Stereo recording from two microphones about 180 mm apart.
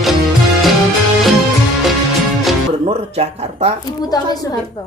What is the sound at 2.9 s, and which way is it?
Speech, 35° right (ahead or behind).